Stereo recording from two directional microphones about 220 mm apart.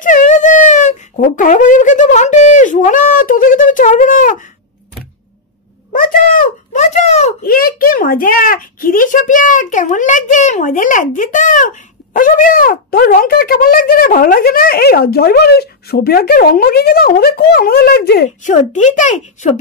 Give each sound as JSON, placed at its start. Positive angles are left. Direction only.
{"t": 0.0, "sound": "speech", "side_deg": 35}
{"t": 5.9, "sound": "a sound", "side_deg": 40}
{"t": 7.4, "sound": "speech", "side_deg": 40}